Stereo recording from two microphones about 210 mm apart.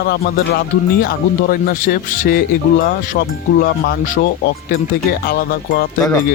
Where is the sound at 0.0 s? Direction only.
45° left (ahead or behind).